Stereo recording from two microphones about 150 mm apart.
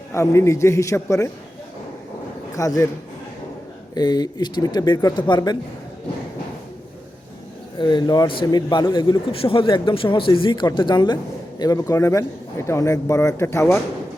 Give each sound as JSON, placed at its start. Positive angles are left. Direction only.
{"t": 0.1, "sound": "a man's voice", "side_deg": 20}
{"t": 2.6, "sound": "a man's voice", "side_deg": 20}
{"t": 3.9, "sound": "a man's voice", "side_deg": 25}
{"t": 7.8, "sound": "a man's voice", "side_deg": 30}